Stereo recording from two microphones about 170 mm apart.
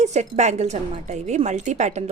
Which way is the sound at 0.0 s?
40° right (ahead or behind).